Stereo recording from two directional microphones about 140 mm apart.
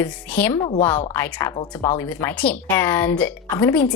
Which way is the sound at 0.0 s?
15° left (ahead or behind).